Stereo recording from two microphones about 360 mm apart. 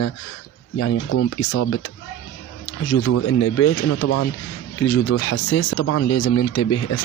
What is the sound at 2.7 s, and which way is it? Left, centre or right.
Speech, left.